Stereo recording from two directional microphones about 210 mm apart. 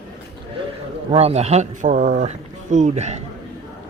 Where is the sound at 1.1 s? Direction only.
30° right (ahead or behind).